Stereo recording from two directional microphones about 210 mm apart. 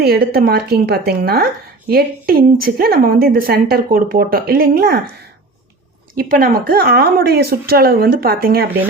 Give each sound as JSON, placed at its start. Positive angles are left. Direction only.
{"t": 0.0, "sound": "speech", "side_deg": -45}
{"t": 6.1, "sound": "speech", "side_deg": -45}